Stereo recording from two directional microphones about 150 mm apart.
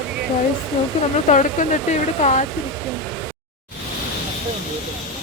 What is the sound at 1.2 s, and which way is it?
Speech, 55° left (ahead or behind).